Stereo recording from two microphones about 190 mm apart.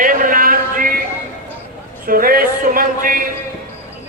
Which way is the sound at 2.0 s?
50° right (ahead or behind).